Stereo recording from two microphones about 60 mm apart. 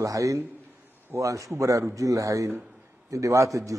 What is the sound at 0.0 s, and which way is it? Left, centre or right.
A man's voice, right.